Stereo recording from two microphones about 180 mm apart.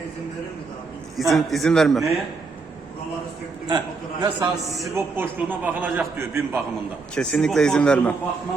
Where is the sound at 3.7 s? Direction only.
25° right (ahead or behind).